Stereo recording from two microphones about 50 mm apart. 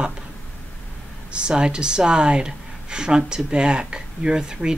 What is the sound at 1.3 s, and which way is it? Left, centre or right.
Speech, centre.